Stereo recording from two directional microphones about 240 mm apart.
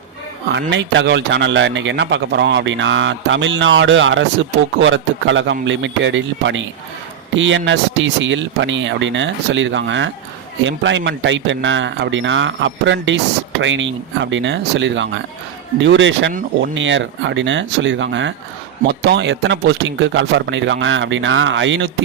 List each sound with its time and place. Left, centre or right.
0.5 s a man's voice: right